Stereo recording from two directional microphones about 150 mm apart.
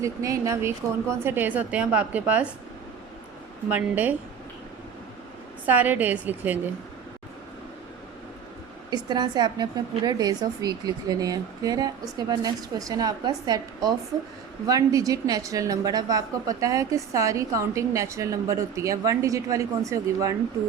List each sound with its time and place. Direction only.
0.0 s a woman's voice: 20° right (ahead or behind)
3.7 s a woman's voice: 10° right (ahead or behind)
5.6 s a woman's voice: 10° right (ahead or behind)
8.9 s a woman's voice: 30° right (ahead or behind)